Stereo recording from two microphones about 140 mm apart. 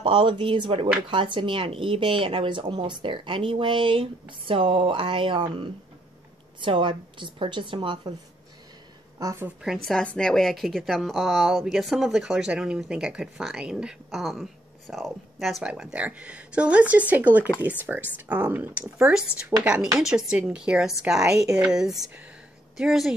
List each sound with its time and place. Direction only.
0.0 s speech: 35° right (ahead or behind)
9.2 s a woman's voice: 20° right (ahead or behind)
9.6 s a woman's voice: centre (ahead or behind)